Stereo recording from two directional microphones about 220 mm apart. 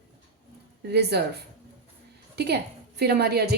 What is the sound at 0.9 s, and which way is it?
Speech, 50° right (ahead or behind).